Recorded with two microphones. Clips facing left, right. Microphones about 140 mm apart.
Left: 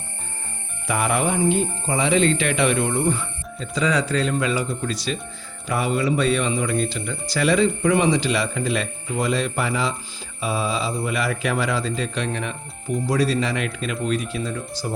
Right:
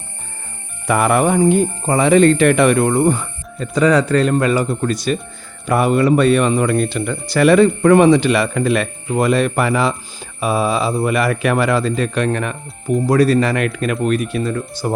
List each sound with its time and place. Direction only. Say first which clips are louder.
0.9 s speech: right 7 dB; 55° right (ahead or behind)